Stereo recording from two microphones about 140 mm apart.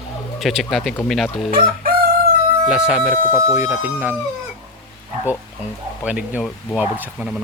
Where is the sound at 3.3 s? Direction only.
15° right (ahead or behind).